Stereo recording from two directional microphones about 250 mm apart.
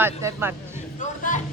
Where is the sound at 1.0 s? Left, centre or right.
Left.